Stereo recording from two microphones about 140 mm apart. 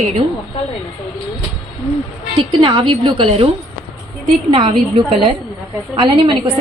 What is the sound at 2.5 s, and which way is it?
A woman's voice, 35° right (ahead or behind).